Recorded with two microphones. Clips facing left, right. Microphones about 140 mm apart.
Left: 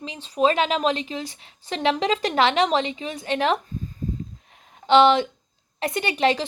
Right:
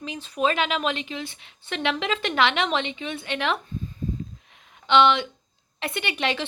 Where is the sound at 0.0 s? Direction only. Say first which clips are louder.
Left 4 dB; 30° left (ahead or behind).